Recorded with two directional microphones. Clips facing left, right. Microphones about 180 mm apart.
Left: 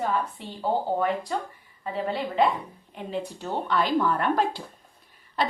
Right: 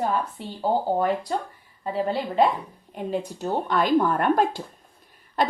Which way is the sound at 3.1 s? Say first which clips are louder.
Right 4 dB; 45° right (ahead or behind).